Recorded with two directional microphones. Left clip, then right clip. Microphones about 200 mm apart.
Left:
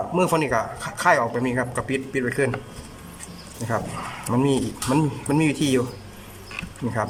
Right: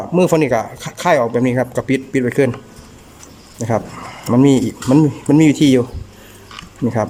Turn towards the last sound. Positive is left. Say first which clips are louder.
# right 8 dB
turn(degrees=-30)  # may be behind; listen again after turning